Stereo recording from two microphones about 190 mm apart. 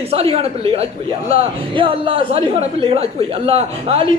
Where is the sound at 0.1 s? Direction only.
30° right (ahead or behind).